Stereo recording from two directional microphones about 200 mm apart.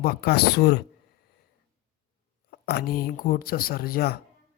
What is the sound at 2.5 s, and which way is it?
Speech, 50° left (ahead or behind).